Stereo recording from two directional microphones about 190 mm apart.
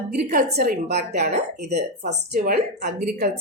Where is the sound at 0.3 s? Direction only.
50° right (ahead or behind).